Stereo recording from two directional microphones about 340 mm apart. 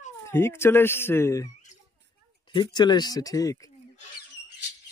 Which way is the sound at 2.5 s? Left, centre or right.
Centre.